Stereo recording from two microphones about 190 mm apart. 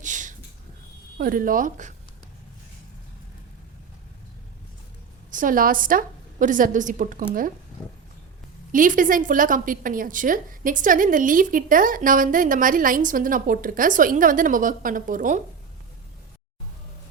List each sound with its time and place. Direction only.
0.0 s a sound: 40° right (ahead or behind)
1.2 s a woman's voice: 45° right (ahead or behind)
5.3 s a woman's voice: 45° right (ahead or behind)
8.7 s a woman's voice: 45° right (ahead or behind)